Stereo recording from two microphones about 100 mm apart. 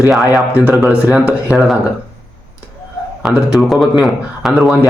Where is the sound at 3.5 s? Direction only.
Centre (ahead or behind).